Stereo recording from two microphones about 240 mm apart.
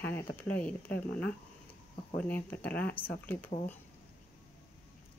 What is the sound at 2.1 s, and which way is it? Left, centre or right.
Speech, centre.